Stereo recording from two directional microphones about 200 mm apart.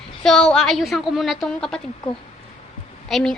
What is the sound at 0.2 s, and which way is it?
A woman's voice, 5° left (ahead or behind).